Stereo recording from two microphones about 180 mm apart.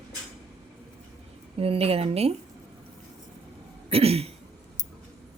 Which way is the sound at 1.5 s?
30° right (ahead or behind).